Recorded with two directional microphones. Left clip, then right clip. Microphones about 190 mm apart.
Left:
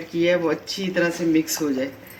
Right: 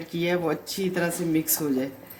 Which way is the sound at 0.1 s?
60° right (ahead or behind).